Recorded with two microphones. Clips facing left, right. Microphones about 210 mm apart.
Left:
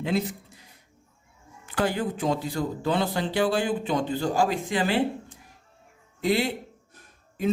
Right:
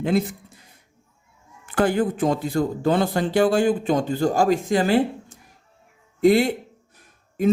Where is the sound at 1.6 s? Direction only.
50° right (ahead or behind).